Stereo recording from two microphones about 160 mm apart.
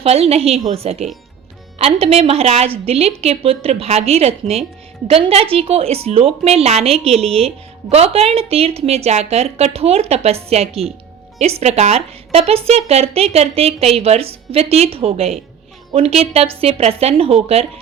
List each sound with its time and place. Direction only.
0.0 s a woman's voice: 40° right (ahead or behind)